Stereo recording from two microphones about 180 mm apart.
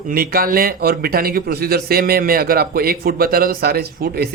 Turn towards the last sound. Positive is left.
turn(degrees=-60)  # may be behind; listen again after turning